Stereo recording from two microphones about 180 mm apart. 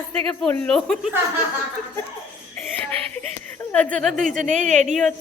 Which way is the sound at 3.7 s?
5° left (ahead or behind).